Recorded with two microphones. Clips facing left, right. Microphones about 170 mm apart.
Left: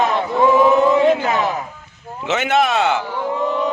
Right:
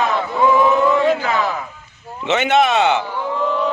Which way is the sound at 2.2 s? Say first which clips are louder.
Right 2 dB; centre (ahead or behind).